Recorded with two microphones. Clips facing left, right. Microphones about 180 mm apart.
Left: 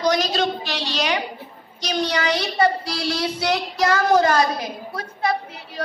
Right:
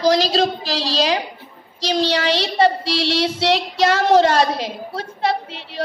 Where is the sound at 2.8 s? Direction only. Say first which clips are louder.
Right 5 dB; 80° right.